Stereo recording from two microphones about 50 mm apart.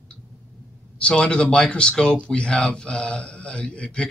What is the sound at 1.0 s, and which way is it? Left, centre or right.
A man's voice, left.